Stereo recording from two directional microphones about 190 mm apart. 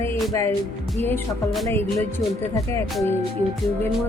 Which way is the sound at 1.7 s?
15° left (ahead or behind).